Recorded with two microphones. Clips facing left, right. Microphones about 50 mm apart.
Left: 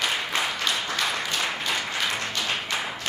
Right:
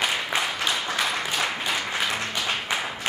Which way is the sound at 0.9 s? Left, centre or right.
Centre.